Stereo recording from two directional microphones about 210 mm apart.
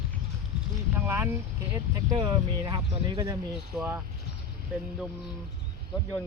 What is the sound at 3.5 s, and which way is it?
Speech, 5° right (ahead or behind).